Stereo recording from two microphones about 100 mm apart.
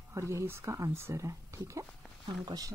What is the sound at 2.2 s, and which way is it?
Speech, 55° right (ahead or behind).